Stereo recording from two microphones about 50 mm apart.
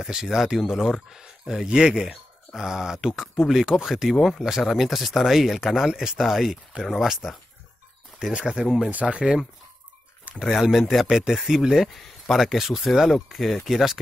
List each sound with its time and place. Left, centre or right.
0.1 s speech: centre
8.3 s speech: centre
10.4 s speech: centre